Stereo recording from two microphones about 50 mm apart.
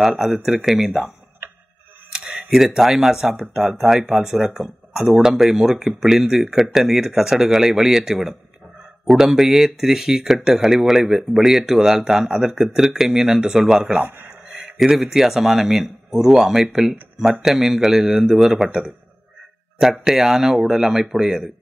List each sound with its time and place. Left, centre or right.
0.2 s speech: centre
2.1 s a sound: centre
2.5 s speech: centre
14.0 s speech: right
14.5 s speech: centre
20.1 s speech: centre